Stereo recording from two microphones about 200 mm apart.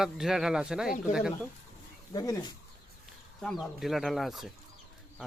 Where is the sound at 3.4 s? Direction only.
Centre (ahead or behind).